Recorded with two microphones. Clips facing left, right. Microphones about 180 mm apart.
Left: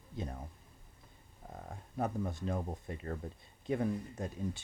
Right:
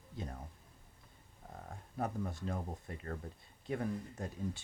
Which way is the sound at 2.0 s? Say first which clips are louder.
Left 3 dB; 20° left (ahead or behind).